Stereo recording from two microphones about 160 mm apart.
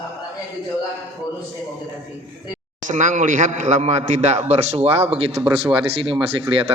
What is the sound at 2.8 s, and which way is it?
A man's voice, 50° right (ahead or behind).